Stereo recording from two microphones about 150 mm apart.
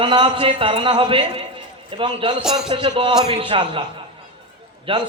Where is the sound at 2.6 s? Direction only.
35° right (ahead or behind).